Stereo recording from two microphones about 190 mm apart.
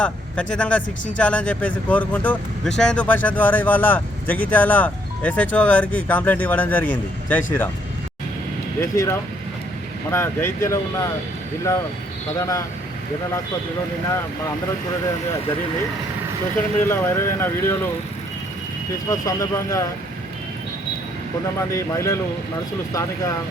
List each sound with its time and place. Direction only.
0.0 s speech: 5° left (ahead or behind)
8.8 s speech: 15° left (ahead or behind)
12.4 s speech: 15° left (ahead or behind)
16.8 s speech: 10° left (ahead or behind)
19.1 s speech: 20° left (ahead or behind)
21.6 s speech: 15° left (ahead or behind)